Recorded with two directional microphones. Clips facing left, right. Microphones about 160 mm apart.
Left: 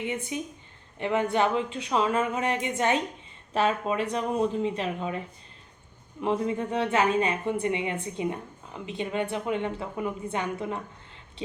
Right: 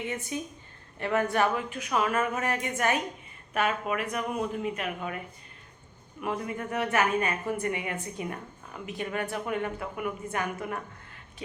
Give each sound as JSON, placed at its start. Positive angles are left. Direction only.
{"t": 0.3, "sound": "a woman's voice", "side_deg": 15}
{"t": 6.2, "sound": "a woman's voice", "side_deg": 25}